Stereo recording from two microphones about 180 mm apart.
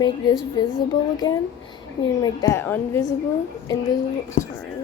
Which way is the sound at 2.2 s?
20° left (ahead or behind).